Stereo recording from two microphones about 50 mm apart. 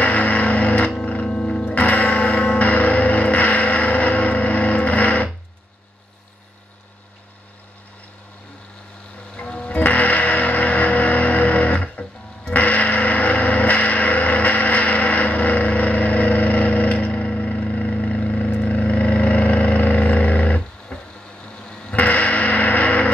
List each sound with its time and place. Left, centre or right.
0.0 s music: left
1.8 s music: left
9.4 s music: left
18.6 s vehicle: left
21.9 s music: left